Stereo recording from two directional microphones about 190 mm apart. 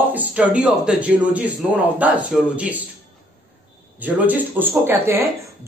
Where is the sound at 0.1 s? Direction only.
5° right (ahead or behind).